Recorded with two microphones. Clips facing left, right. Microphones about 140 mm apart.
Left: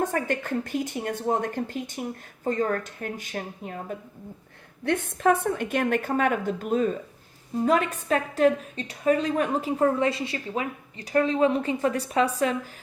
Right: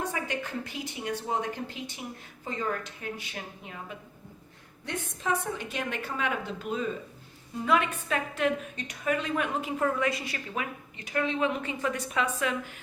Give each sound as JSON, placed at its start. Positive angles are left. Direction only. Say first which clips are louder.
{"t": 0.0, "sound": "a woman's voice", "louder": "left 6 dB", "side_deg": 50}
{"t": 4.9, "sound": "a woman's voice", "louder": "left 9 dB", "side_deg": 60}